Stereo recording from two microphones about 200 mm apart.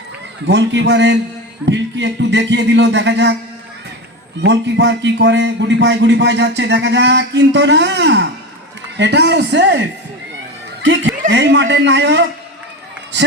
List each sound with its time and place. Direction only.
0.4 s speech: 60° right (ahead or behind)
4.4 s speech: 60° right (ahead or behind)